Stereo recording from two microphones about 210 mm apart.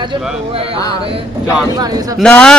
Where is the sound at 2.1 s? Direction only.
5° left (ahead or behind).